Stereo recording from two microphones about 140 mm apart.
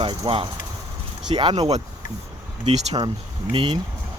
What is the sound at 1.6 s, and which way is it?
Speech, 50° right (ahead or behind).